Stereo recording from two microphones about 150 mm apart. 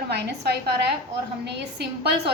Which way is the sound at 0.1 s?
90° right.